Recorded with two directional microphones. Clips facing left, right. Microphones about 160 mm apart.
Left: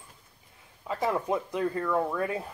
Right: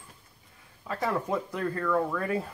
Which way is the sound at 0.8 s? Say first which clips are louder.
Left 2 dB; 20° left (ahead or behind).